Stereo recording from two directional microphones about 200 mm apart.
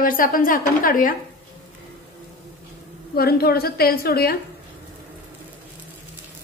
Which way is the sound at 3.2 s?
50° left (ahead or behind).